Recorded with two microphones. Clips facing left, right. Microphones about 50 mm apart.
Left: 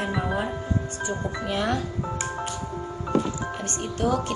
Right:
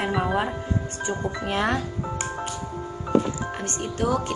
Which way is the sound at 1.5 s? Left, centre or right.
Right.